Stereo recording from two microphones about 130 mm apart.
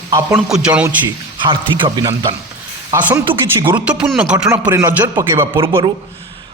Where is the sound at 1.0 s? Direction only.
40° right (ahead or behind).